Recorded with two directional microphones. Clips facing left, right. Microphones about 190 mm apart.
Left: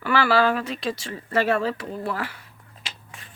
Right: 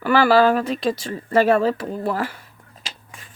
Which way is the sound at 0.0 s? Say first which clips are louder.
Right 5 dB; 45° right (ahead or behind).